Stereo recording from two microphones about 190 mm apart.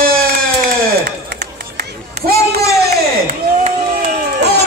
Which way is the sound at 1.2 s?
60° right (ahead or behind).